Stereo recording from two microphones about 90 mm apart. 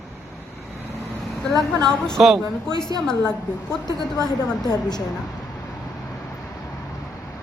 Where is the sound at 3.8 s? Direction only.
50° left (ahead or behind).